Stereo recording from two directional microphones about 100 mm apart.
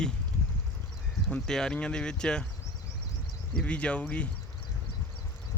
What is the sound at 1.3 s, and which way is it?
Speech, 5° left (ahead or behind).